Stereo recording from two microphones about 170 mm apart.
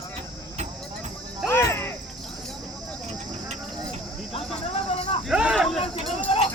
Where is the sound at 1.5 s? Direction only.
15° left (ahead or behind).